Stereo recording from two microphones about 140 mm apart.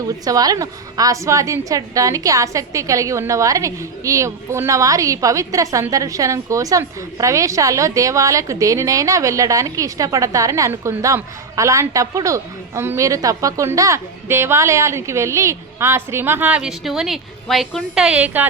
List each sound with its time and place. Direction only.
0.3 s a woman's voice: 25° right (ahead or behind); by 18.4 s 10° right (ahead or behind)